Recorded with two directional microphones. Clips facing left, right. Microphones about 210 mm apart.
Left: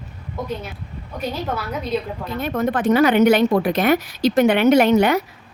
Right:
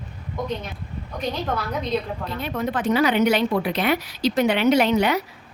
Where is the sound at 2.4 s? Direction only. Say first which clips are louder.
Left 5 dB; 50° left (ahead or behind).